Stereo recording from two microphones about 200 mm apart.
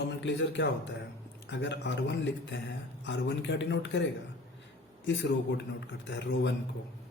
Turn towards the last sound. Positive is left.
turn(degrees=60)  # may be behind; listen again after turning